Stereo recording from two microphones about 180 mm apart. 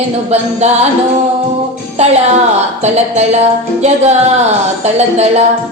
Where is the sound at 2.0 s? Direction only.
35° right (ahead or behind).